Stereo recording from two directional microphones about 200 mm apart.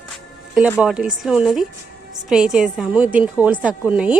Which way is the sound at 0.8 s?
5° right (ahead or behind).